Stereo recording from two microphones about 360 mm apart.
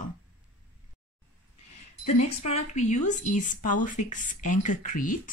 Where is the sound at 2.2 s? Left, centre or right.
Centre.